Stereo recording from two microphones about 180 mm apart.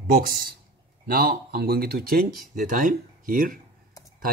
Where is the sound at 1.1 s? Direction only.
55° right (ahead or behind).